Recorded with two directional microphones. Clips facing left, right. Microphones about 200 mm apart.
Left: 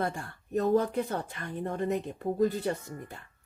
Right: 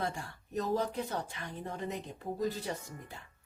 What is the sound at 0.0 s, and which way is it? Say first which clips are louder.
A woman's voice: left 4 dB; 55° left (ahead or behind).